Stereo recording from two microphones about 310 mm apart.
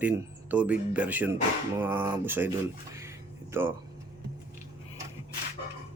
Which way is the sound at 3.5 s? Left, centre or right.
Centre.